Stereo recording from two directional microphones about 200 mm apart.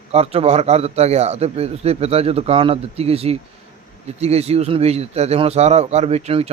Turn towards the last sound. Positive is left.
turn(degrees=-30)  # may be behind; listen again after turning